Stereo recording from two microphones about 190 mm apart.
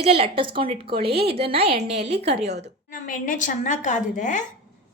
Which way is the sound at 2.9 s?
45° left (ahead or behind).